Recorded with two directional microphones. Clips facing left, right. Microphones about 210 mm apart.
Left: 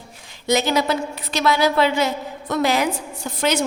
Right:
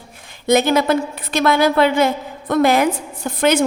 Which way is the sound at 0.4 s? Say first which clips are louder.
Right 5 dB; 55° right (ahead or behind).